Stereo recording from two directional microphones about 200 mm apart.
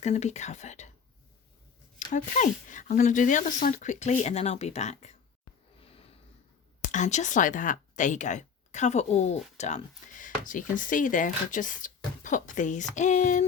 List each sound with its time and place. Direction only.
0.0 s speech: 35° left (ahead or behind)
2.1 s speech: 40° left (ahead or behind)
6.8 s speech: 35° left (ahead or behind)